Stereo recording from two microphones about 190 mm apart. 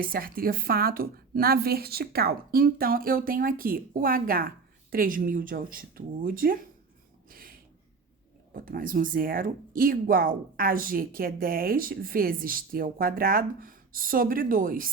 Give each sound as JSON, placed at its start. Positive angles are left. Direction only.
{"t": 0.0, "sound": "a woman's voice", "side_deg": -50}
{"t": 7.3, "sound": "a sound", "side_deg": -50}
{"t": 8.5, "sound": "a woman's voice", "side_deg": -50}